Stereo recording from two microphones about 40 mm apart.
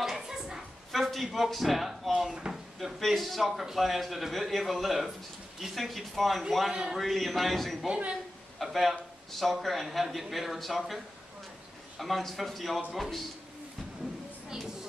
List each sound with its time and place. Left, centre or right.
0.0 s a sound: centre
0.9 s a man's voice: centre
3.1 s a man's voice: centre
7.9 s speech: right
8.5 s a man's voice: centre
12.0 s a man's voice: centre